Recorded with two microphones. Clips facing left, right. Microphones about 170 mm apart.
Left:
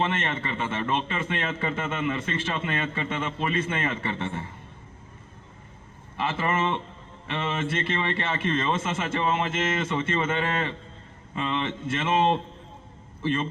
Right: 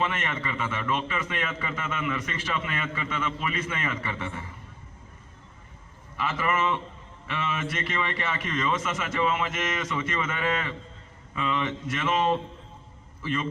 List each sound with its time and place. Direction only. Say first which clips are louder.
0.0 s a man's voice: left 2 dB; 25° left (ahead or behind)
6.1 s a man's voice: left 1 dB; 25° left (ahead or behind)